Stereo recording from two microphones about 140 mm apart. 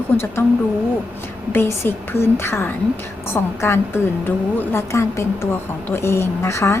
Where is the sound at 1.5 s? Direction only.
15° left (ahead or behind).